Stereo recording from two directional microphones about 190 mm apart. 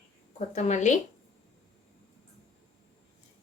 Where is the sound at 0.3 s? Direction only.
40° left (ahead or behind).